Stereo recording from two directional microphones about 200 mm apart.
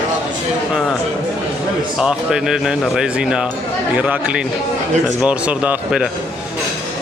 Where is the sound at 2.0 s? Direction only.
5° right (ahead or behind).